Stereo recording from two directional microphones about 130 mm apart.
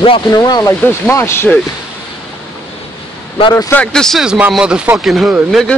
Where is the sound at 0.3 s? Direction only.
30° left (ahead or behind).